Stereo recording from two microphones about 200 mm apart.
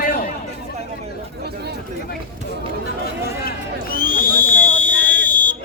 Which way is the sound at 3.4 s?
45° left (ahead or behind).